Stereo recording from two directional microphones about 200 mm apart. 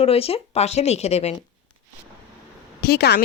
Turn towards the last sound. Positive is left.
turn(degrees=55)  # may be behind; listen again after turning